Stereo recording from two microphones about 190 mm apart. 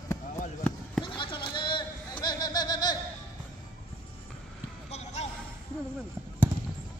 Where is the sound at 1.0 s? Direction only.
25° left (ahead or behind).